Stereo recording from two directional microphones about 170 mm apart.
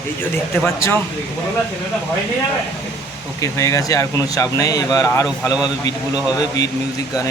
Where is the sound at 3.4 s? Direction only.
20° left (ahead or behind).